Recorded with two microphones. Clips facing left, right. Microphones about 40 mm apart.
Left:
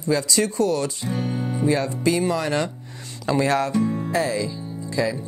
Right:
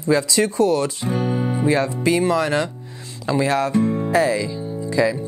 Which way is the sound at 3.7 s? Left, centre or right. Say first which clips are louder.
Right 3 dB; right.